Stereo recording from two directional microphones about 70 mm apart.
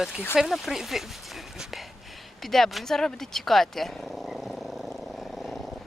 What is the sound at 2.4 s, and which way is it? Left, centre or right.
Purr, centre.